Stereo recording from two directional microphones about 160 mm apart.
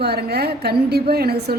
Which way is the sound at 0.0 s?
90° right.